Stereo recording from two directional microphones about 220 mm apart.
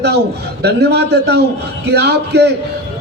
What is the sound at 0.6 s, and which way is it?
A man's voice, 50° right (ahead or behind).